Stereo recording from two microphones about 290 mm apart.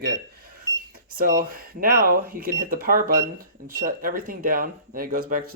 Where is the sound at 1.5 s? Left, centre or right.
Right.